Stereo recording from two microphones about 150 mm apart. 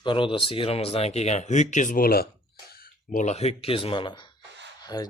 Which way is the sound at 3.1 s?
55° left (ahead or behind).